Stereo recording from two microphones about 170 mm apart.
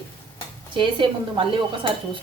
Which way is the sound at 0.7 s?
30° right (ahead or behind).